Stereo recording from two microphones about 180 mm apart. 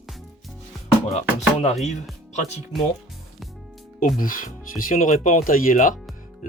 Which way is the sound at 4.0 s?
50° left (ahead or behind).